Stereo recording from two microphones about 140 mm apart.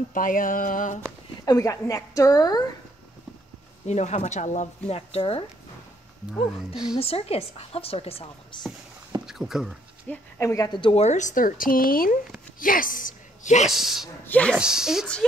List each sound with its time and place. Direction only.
0.1 s mantra: 75° left (ahead or behind)
1.4 s a woman's voice: 25° left (ahead or behind)
3.8 s speech: 55° left (ahead or behind)
7.0 s speech: 45° left (ahead or behind)
9.2 s speech: 5° right (ahead or behind)
10.0 s speech: 20° left (ahead or behind)
10.7 s a woman's voice: 40° left (ahead or behind)
11.1 s speech: 60° left (ahead or behind); by 12.2 s 90° left
12.5 s a woman's voice: 80° left; by 13.7 s 60° left (ahead or behind)
13.7 s a woman's voice: centre (ahead or behind)
14.2 s speech: 10° left (ahead or behind)
14.6 s a woman's voice: 5° right (ahead or behind)